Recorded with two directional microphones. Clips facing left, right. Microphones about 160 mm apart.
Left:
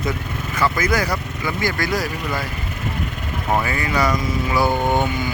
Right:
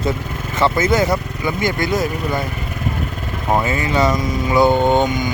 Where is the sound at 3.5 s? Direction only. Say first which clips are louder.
Right 3 dB; 25° right (ahead or behind).